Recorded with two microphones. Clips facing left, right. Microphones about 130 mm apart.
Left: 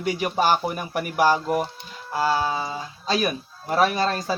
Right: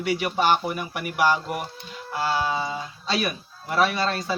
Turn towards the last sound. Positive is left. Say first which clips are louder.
# left 2 dB
turn(degrees=40)  # may be behind; listen again after turning